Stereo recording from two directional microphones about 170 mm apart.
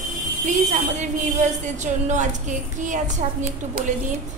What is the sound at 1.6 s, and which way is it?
A woman's voice, 45° right (ahead or behind).